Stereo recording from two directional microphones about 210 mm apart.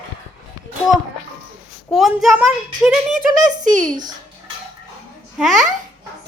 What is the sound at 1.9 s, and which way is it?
Speech, centre (ahead or behind).